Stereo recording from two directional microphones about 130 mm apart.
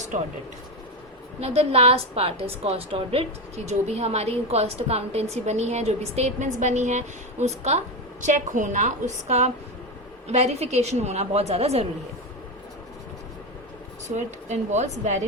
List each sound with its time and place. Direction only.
1.4 s a woman's voice: 50° right (ahead or behind)
8.2 s a woman's voice: 75° right (ahead or behind); by 11.9 s 50° right (ahead or behind)
14.2 s a woman's voice: 65° right (ahead or behind)